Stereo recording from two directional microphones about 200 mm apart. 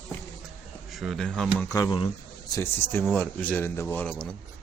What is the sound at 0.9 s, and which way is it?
Speech, centre (ahead or behind).